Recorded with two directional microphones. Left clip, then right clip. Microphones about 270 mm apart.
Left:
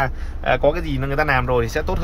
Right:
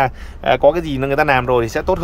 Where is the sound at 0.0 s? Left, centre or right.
Right.